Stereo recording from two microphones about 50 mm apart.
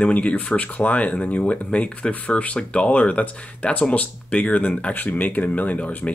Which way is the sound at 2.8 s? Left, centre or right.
Left.